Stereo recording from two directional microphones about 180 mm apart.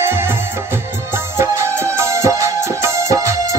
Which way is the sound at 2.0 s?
15° right (ahead or behind).